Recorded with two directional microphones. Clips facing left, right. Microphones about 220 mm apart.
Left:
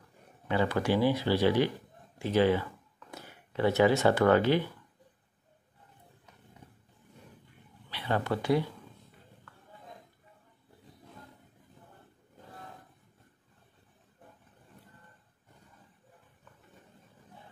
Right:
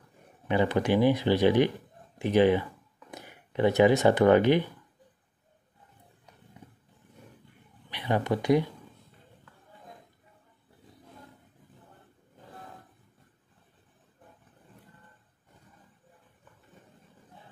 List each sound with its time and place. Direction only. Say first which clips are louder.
0.5 s speech: right 3 dB; 20° right (ahead or behind)
7.9 s speech: right 3 dB; 15° right (ahead or behind)